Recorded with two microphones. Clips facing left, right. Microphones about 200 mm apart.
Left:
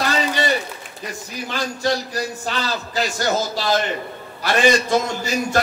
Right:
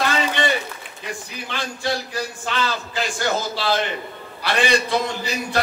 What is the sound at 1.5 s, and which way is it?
A man's voice, 40° left (ahead or behind).